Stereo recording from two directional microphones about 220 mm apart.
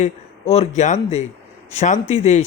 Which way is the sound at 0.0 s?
30° left (ahead or behind).